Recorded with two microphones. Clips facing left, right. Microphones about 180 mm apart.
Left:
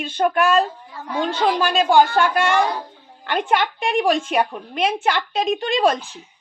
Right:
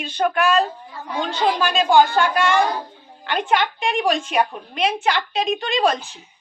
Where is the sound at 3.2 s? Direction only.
50° left (ahead or behind).